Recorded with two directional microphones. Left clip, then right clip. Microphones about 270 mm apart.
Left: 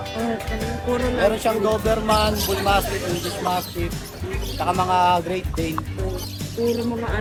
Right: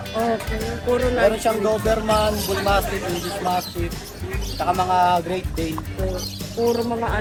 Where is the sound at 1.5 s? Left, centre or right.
Left.